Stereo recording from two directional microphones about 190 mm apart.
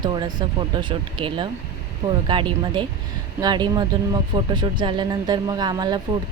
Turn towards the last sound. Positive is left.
turn(degrees=-20)  # may be behind; listen again after turning